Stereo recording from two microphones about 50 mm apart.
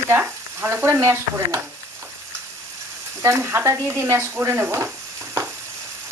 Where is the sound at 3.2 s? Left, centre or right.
Right.